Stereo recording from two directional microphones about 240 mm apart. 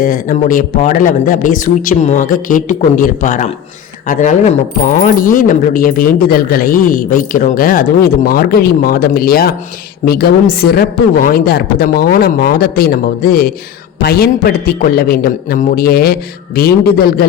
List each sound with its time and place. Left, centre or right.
0.0 s speech: left